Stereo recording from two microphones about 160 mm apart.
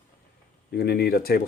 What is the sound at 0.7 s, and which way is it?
Speech, 80° left.